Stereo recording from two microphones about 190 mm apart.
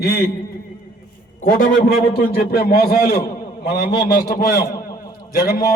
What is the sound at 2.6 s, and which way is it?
Speech, 55° left (ahead or behind).